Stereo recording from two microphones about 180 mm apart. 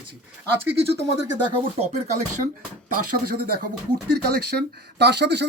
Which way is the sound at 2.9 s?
55° right (ahead or behind).